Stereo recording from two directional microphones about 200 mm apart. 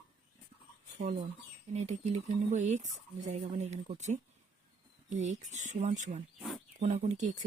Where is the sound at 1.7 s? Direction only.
35° right (ahead or behind).